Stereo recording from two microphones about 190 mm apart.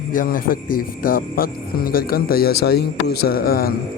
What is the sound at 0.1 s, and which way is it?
Speech, 45° left (ahead or behind).